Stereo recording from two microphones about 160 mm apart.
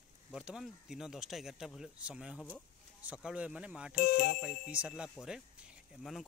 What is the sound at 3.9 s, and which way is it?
Speech, 65° left (ahead or behind).